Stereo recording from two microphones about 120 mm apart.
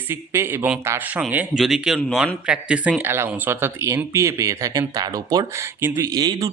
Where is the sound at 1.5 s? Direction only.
Centre (ahead or behind).